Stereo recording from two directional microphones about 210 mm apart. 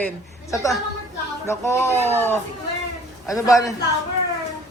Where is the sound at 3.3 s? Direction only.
15° left (ahead or behind).